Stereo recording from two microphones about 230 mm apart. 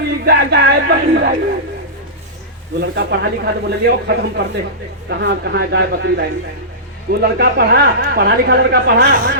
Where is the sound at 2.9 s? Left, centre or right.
Right.